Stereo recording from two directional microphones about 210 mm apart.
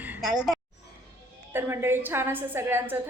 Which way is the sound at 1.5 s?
10° right (ahead or behind).